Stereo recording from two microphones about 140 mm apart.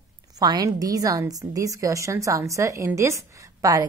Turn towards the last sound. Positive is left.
turn(degrees=-25)  # may be behind; listen again after turning